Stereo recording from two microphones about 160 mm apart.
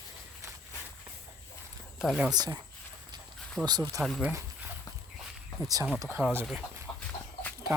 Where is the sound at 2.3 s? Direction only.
25° right (ahead or behind).